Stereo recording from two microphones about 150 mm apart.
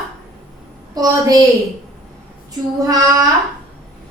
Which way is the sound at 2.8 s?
25° right (ahead or behind).